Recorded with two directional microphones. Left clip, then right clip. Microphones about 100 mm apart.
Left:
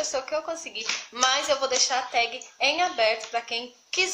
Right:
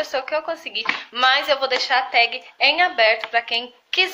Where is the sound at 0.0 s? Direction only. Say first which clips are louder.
Right 5 dB; 25° left (ahead or behind).